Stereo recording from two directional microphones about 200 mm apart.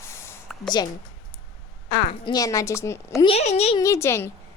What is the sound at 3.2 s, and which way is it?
Speech, 30° left (ahead or behind).